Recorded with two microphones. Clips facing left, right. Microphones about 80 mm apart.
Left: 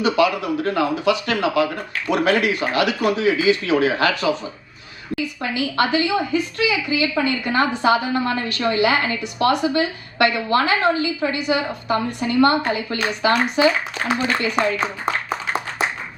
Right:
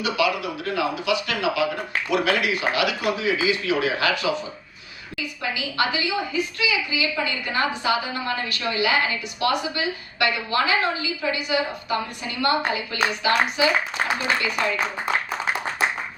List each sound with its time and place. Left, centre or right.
0.0 s a woman's voice: left
5.4 s a woman's voice: left
14.1 s speech: left